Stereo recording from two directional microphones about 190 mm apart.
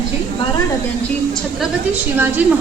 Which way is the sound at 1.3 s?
5° right (ahead or behind).